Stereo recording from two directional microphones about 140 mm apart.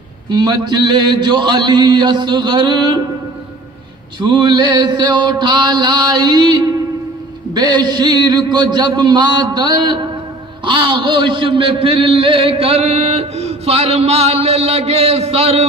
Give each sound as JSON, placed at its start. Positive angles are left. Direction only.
{"t": 0.3, "sound": "mantra", "side_deg": -30}
{"t": 4.2, "sound": "mantra", "side_deg": -35}
{"t": 10.6, "sound": "a man's voice", "side_deg": -35}